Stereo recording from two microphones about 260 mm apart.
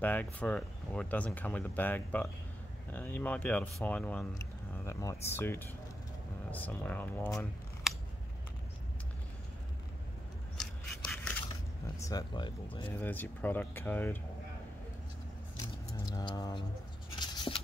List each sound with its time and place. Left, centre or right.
0.0 s speech: centre
10.6 s a sound: centre
12.0 s speech: centre
16.1 s speech: centre
17.2 s scissors: centre